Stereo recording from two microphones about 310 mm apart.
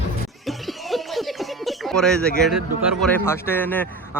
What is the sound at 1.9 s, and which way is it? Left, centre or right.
A man's voice, centre.